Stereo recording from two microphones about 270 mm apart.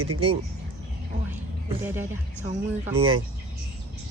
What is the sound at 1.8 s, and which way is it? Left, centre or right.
Speech, centre.